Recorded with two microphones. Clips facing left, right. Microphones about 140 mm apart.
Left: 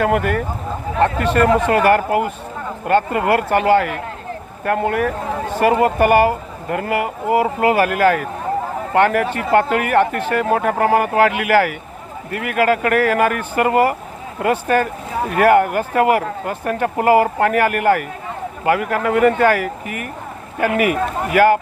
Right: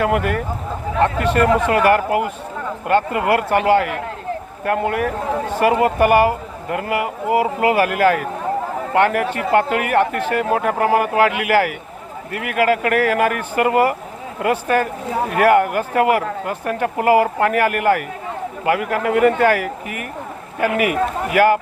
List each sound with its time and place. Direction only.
0.0 s speech: 40° left (ahead or behind)